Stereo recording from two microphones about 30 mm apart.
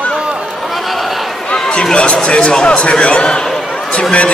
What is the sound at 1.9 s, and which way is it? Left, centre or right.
Speech, left.